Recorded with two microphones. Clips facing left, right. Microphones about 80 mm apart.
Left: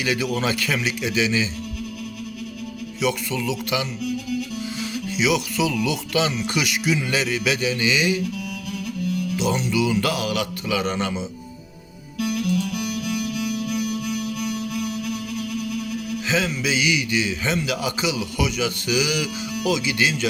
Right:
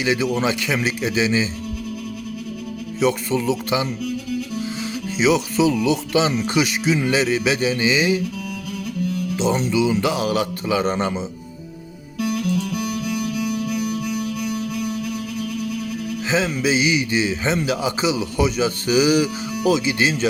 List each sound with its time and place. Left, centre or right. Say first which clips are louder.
0.0 s a man's voice: right 3 dB; right
0.8 s a man's voice: right 2 dB; right
3.0 s a man's voice: right 4 dB; right
9.3 s a man's voice: right 4 dB; right
12.2 s music: right 1 dB; right
16.3 s a man's voice: right 4 dB; right